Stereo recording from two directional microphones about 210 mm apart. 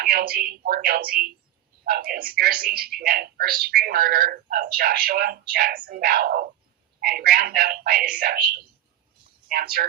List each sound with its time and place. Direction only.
0.0 s speech: 45° right (ahead or behind)